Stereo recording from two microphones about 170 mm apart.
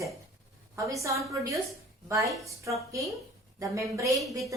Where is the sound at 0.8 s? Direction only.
20° right (ahead or behind).